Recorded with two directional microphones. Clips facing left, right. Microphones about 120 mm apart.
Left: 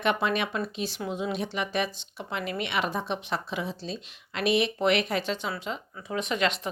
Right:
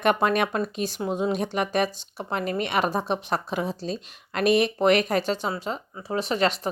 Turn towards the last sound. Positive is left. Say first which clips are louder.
# right 4 dB
turn(degrees=-40)  # may be behind; listen again after turning